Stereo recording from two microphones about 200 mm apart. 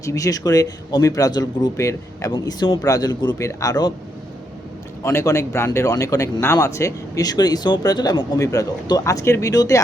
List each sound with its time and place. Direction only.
0.0 s speech: 15° left (ahead or behind)
5.0 s speech: 15° left (ahead or behind)